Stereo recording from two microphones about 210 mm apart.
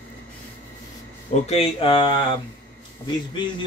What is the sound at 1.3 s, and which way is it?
Speech, 30° left (ahead or behind).